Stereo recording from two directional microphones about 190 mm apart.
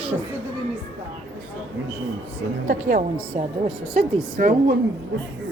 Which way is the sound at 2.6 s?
45° right (ahead or behind).